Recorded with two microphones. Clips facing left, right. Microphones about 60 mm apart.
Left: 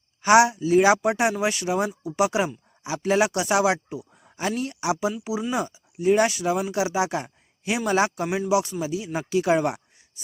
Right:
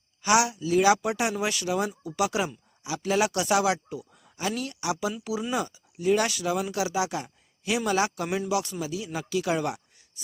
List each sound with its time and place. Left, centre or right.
0.2 s speech: left
8.3 s speech: centre